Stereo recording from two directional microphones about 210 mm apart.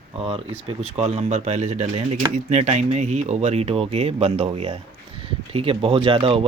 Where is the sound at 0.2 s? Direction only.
30° right (ahead or behind).